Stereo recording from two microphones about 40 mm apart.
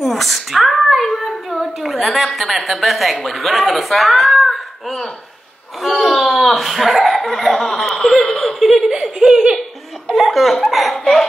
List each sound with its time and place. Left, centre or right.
0.0 s a sound: centre
5.8 s speech: centre
8.5 s laughter: centre
9.2 s speech: centre
10.1 s speech: centre